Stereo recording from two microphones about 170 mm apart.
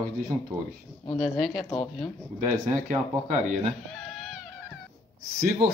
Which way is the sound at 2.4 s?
40° right (ahead or behind).